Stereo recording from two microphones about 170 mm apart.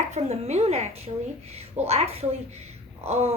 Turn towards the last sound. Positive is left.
turn(degrees=-40)  # may be behind; listen again after turning